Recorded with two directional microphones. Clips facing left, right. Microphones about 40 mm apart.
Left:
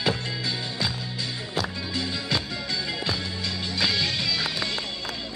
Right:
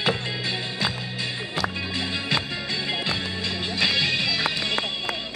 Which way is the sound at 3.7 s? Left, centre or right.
Right.